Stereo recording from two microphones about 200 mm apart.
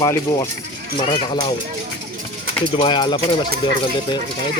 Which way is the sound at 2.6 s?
25° left (ahead or behind).